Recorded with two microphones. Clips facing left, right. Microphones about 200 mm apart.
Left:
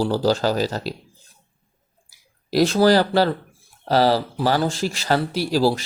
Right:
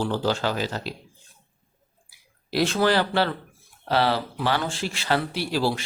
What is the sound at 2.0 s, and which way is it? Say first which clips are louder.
Speech: left 6 dB; 40° left (ahead or behind).